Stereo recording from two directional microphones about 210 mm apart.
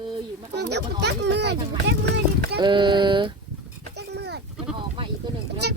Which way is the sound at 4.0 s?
55° right (ahead or behind).